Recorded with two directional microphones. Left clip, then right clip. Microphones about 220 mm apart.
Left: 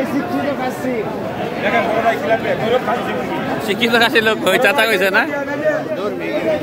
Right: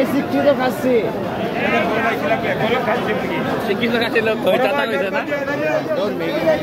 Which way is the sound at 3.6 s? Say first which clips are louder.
Left 8 dB; 50° left (ahead or behind).